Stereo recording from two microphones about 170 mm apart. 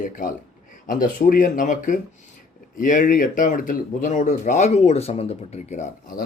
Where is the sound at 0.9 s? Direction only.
55° left (ahead or behind).